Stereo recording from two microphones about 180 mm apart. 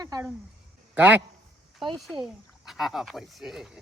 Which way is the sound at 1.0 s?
10° right (ahead or behind).